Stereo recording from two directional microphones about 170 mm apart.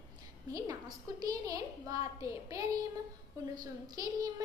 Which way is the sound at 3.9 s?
20° right (ahead or behind).